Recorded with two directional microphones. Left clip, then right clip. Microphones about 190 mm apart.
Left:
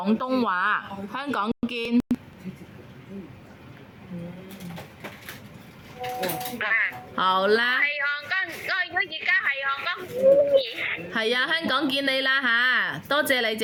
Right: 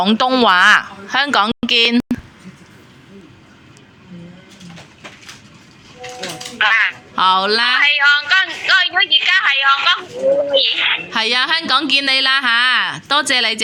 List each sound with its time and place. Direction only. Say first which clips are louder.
0.0 s a woman's voice: right 11 dB; 5° right (ahead or behind)
0.4 s a woman's voice: right 16 dB; 20° right (ahead or behind)
1.2 s a woman's voice: right 12 dB; 10° right (ahead or behind)
6.6 s a woman's voice: right 11 dB; 5° left (ahead or behind)
7.9 s a woman's voice: right 14 dB; 5° left (ahead or behind)
11.1 s a woman's voice: right 8 dB; 10° right (ahead or behind)